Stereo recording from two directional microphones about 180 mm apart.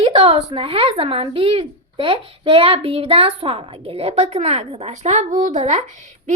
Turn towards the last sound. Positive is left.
turn(degrees=-40)  # may be behind; listen again after turning